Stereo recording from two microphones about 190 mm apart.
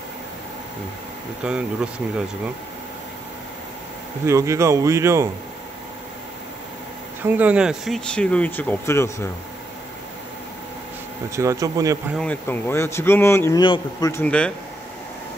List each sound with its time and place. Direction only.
1.4 s speech: 5° right (ahead or behind)
4.3 s speech: 15° right (ahead or behind)
7.2 s speech: 10° right (ahead or behind); by 9.3 s 15° left (ahead or behind)
11.3 s speech: 15° right (ahead or behind)
12.2 s speech: 10° left (ahead or behind)
14.1 s speech: 5° left (ahead or behind)